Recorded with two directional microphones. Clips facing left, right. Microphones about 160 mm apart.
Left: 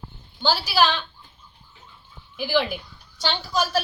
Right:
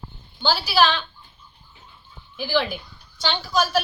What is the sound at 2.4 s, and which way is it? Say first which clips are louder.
A woman's voice: even; 10° left (ahead or behind).